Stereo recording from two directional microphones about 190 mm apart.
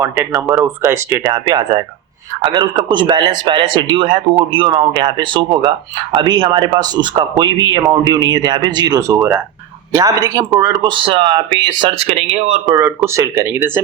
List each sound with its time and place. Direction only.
0.0 s speech: 15° right (ahead or behind); by 12.7 s 30° right (ahead or behind)
12.7 s speech: 15° right (ahead or behind)